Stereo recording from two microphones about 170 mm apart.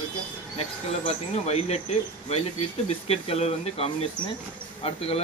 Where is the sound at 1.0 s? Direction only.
40° left (ahead or behind).